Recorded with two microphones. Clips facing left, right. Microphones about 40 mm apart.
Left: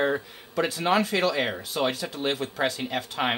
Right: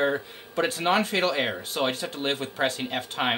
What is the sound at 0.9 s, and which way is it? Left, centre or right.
Speech, right.